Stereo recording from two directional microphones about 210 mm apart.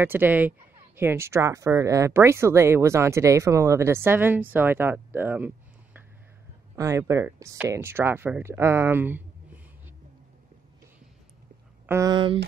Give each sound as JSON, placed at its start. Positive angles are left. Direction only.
{"t": 0.0, "sound": "speech", "side_deg": -10}
{"t": 6.7, "sound": "speech", "side_deg": -15}
{"t": 11.8, "sound": "speech", "side_deg": -15}